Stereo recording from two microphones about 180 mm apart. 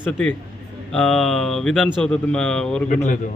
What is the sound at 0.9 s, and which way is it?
A man's voice, 5° left (ahead or behind).